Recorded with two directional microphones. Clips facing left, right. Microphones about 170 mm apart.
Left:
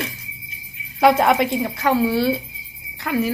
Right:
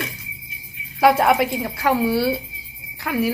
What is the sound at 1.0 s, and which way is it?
A woman's voice, 5° right (ahead or behind).